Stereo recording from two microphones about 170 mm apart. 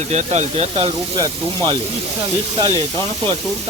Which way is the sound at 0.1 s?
40° right (ahead or behind).